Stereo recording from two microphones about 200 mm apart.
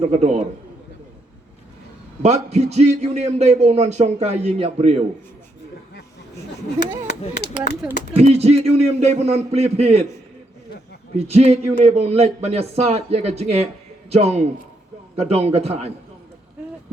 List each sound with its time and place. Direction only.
0.0 s a man's voice: 35° right (ahead or behind)
2.2 s a man's voice: 35° right (ahead or behind)
8.1 s a man's voice: 30° right (ahead or behind)
11.3 s a man's voice: 30° right (ahead or behind)